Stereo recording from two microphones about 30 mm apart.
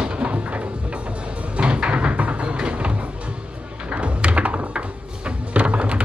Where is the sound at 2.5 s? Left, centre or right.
Right.